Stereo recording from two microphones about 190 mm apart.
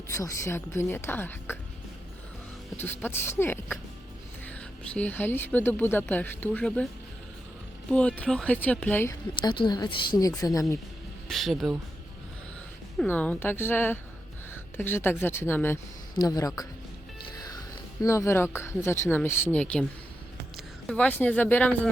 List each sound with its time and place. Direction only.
0.1 s speech: 15° left (ahead or behind)
2.7 s speech: 10° left (ahead or behind)
4.9 s speech: 10° left (ahead or behind)
7.9 s speech: 5° left (ahead or behind)
9.4 s a woman's voice: 25° left (ahead or behind)
11.3 s speech: centre (ahead or behind)
13.0 s speech: 10° left (ahead or behind)
17.3 s music: 20° left (ahead or behind)
18.0 s speech: 15° left (ahead or behind)
20.8 s speech: 5° left (ahead or behind)